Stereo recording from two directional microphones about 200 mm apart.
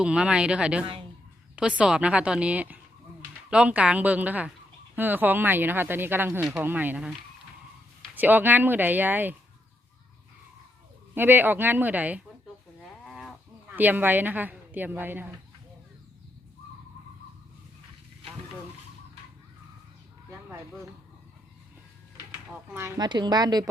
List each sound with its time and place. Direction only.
0.0 s a woman's voice: 5° right (ahead or behind)
11.1 s speech: 10° right (ahead or behind)
13.1 s livestock: centre (ahead or behind)
13.7 s speech: 10° right (ahead or behind)
22.7 s a woman's voice: 15° right (ahead or behind)